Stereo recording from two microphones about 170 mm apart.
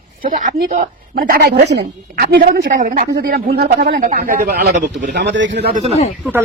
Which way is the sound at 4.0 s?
55° right (ahead or behind).